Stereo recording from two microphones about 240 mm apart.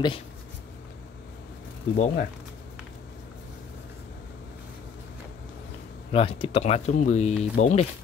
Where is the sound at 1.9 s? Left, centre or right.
Left.